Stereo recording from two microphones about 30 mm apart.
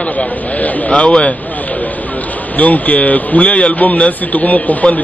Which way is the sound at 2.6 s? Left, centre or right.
Left.